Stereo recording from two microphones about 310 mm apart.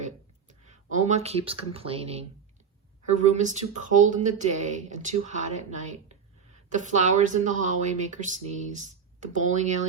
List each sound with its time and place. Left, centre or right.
0.0 s speech: right